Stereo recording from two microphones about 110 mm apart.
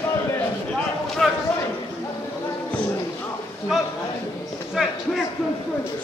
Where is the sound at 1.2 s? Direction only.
Centre (ahead or behind).